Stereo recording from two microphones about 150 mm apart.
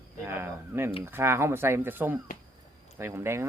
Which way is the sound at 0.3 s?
15° right (ahead or behind).